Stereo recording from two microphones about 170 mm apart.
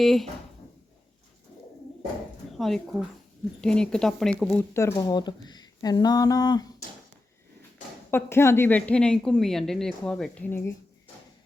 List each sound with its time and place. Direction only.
0.0 s a woman's voice: centre (ahead or behind)
2.5 s a woman's voice: centre (ahead or behind)
4.7 s speech: 15° left (ahead or behind)
8.1 s a woman's voice: 15° left (ahead or behind)